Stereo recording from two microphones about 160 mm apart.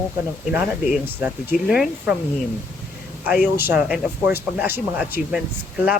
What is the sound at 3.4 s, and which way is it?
Speech, 10° right (ahead or behind).